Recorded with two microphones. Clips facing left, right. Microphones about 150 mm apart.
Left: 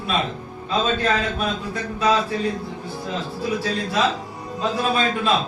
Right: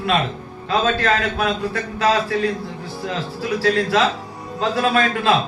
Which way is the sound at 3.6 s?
80° right.